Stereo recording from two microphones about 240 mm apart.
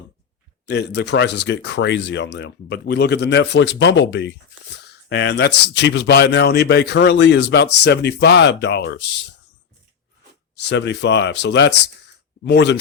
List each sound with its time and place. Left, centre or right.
0.7 s speech: left
10.5 s speech: left